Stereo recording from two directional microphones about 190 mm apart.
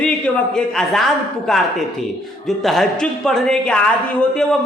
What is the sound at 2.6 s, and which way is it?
A man's voice, centre (ahead or behind).